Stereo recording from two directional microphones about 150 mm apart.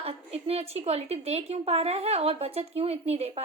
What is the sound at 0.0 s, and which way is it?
A woman's voice, 40° right (ahead or behind).